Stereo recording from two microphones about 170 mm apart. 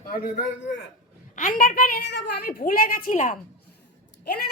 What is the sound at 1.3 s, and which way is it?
A woman's voice, 55° left (ahead or behind).